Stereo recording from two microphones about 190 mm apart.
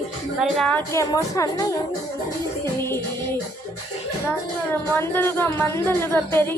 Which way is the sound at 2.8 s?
10° left (ahead or behind).